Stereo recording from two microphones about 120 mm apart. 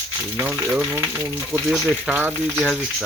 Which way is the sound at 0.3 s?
15° right (ahead or behind).